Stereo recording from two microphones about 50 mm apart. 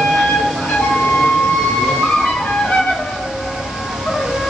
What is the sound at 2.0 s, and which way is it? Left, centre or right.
Music, centre.